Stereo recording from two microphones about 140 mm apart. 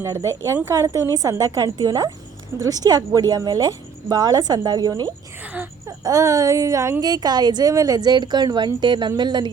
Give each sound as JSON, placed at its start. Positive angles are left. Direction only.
{"t": 0.0, "sound": "speech", "side_deg": -20}